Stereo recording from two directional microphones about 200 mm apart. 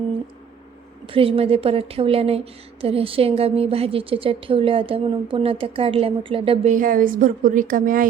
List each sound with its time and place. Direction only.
1.0 s speech: 25° right (ahead or behind)
6.7 s a woman's voice: 45° right (ahead or behind)